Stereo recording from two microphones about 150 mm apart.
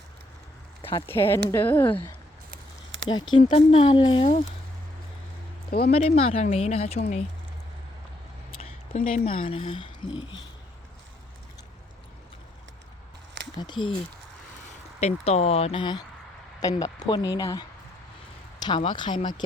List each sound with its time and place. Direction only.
0.8 s speech: 15° left (ahead or behind)
3.1 s speech: 30° left (ahead or behind)
3.5 s speech: 40° left (ahead or behind)
5.9 s speech: 40° left (ahead or behind)
8.4 s speech: 45° left (ahead or behind)
13.6 s speech: 30° left (ahead or behind)
15.0 s speech: 45° left (ahead or behind); by 17.7 s 25° left (ahead or behind)
18.8 s speech: 30° left (ahead or behind)